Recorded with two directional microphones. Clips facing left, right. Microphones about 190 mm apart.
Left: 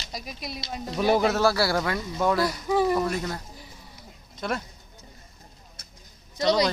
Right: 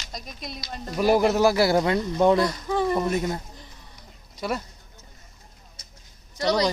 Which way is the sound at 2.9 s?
20° right (ahead or behind).